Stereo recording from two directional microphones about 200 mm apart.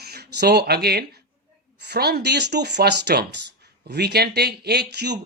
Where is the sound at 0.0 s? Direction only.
55° right (ahead or behind).